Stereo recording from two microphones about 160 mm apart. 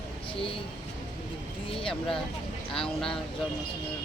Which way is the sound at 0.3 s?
35° left (ahead or behind).